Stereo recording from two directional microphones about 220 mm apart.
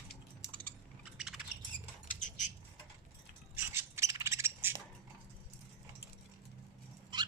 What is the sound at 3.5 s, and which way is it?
Bird, 10° right (ahead or behind).